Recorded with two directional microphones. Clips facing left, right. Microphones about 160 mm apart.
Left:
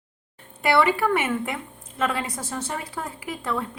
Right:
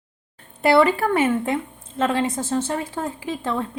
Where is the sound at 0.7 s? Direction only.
30° right (ahead or behind).